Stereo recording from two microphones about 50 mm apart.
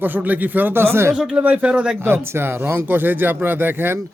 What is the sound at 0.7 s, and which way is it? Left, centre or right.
Speech, right.